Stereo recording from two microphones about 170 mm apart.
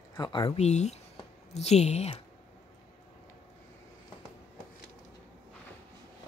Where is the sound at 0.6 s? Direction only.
40° left (ahead or behind).